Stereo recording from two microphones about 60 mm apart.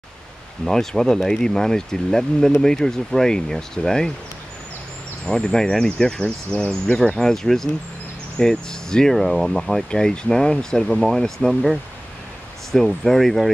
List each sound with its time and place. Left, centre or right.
0.7 s speech: centre
5.2 s speech: centre
9.8 s speech: centre